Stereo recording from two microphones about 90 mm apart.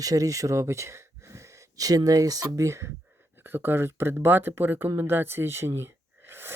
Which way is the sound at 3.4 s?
25° right (ahead or behind).